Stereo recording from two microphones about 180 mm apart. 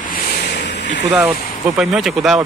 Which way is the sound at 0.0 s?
50° left (ahead or behind).